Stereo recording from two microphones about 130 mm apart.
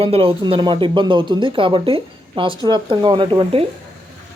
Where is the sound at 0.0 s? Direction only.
45° right (ahead or behind).